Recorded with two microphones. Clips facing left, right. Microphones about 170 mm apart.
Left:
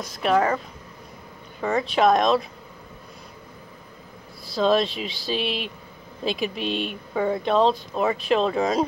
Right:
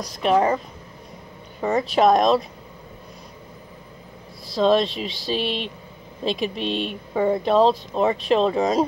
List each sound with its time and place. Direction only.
0.0 s speech: centre (ahead or behind)
1.6 s a woman's voice: 20° right (ahead or behind)
1.9 s speech: centre (ahead or behind)
4.5 s speech: centre (ahead or behind)
7.2 s a woman's voice: 20° right (ahead or behind)
7.4 s speech: centre (ahead or behind)
7.9 s speech: 30° right (ahead or behind)
8.2 s speech: centre (ahead or behind)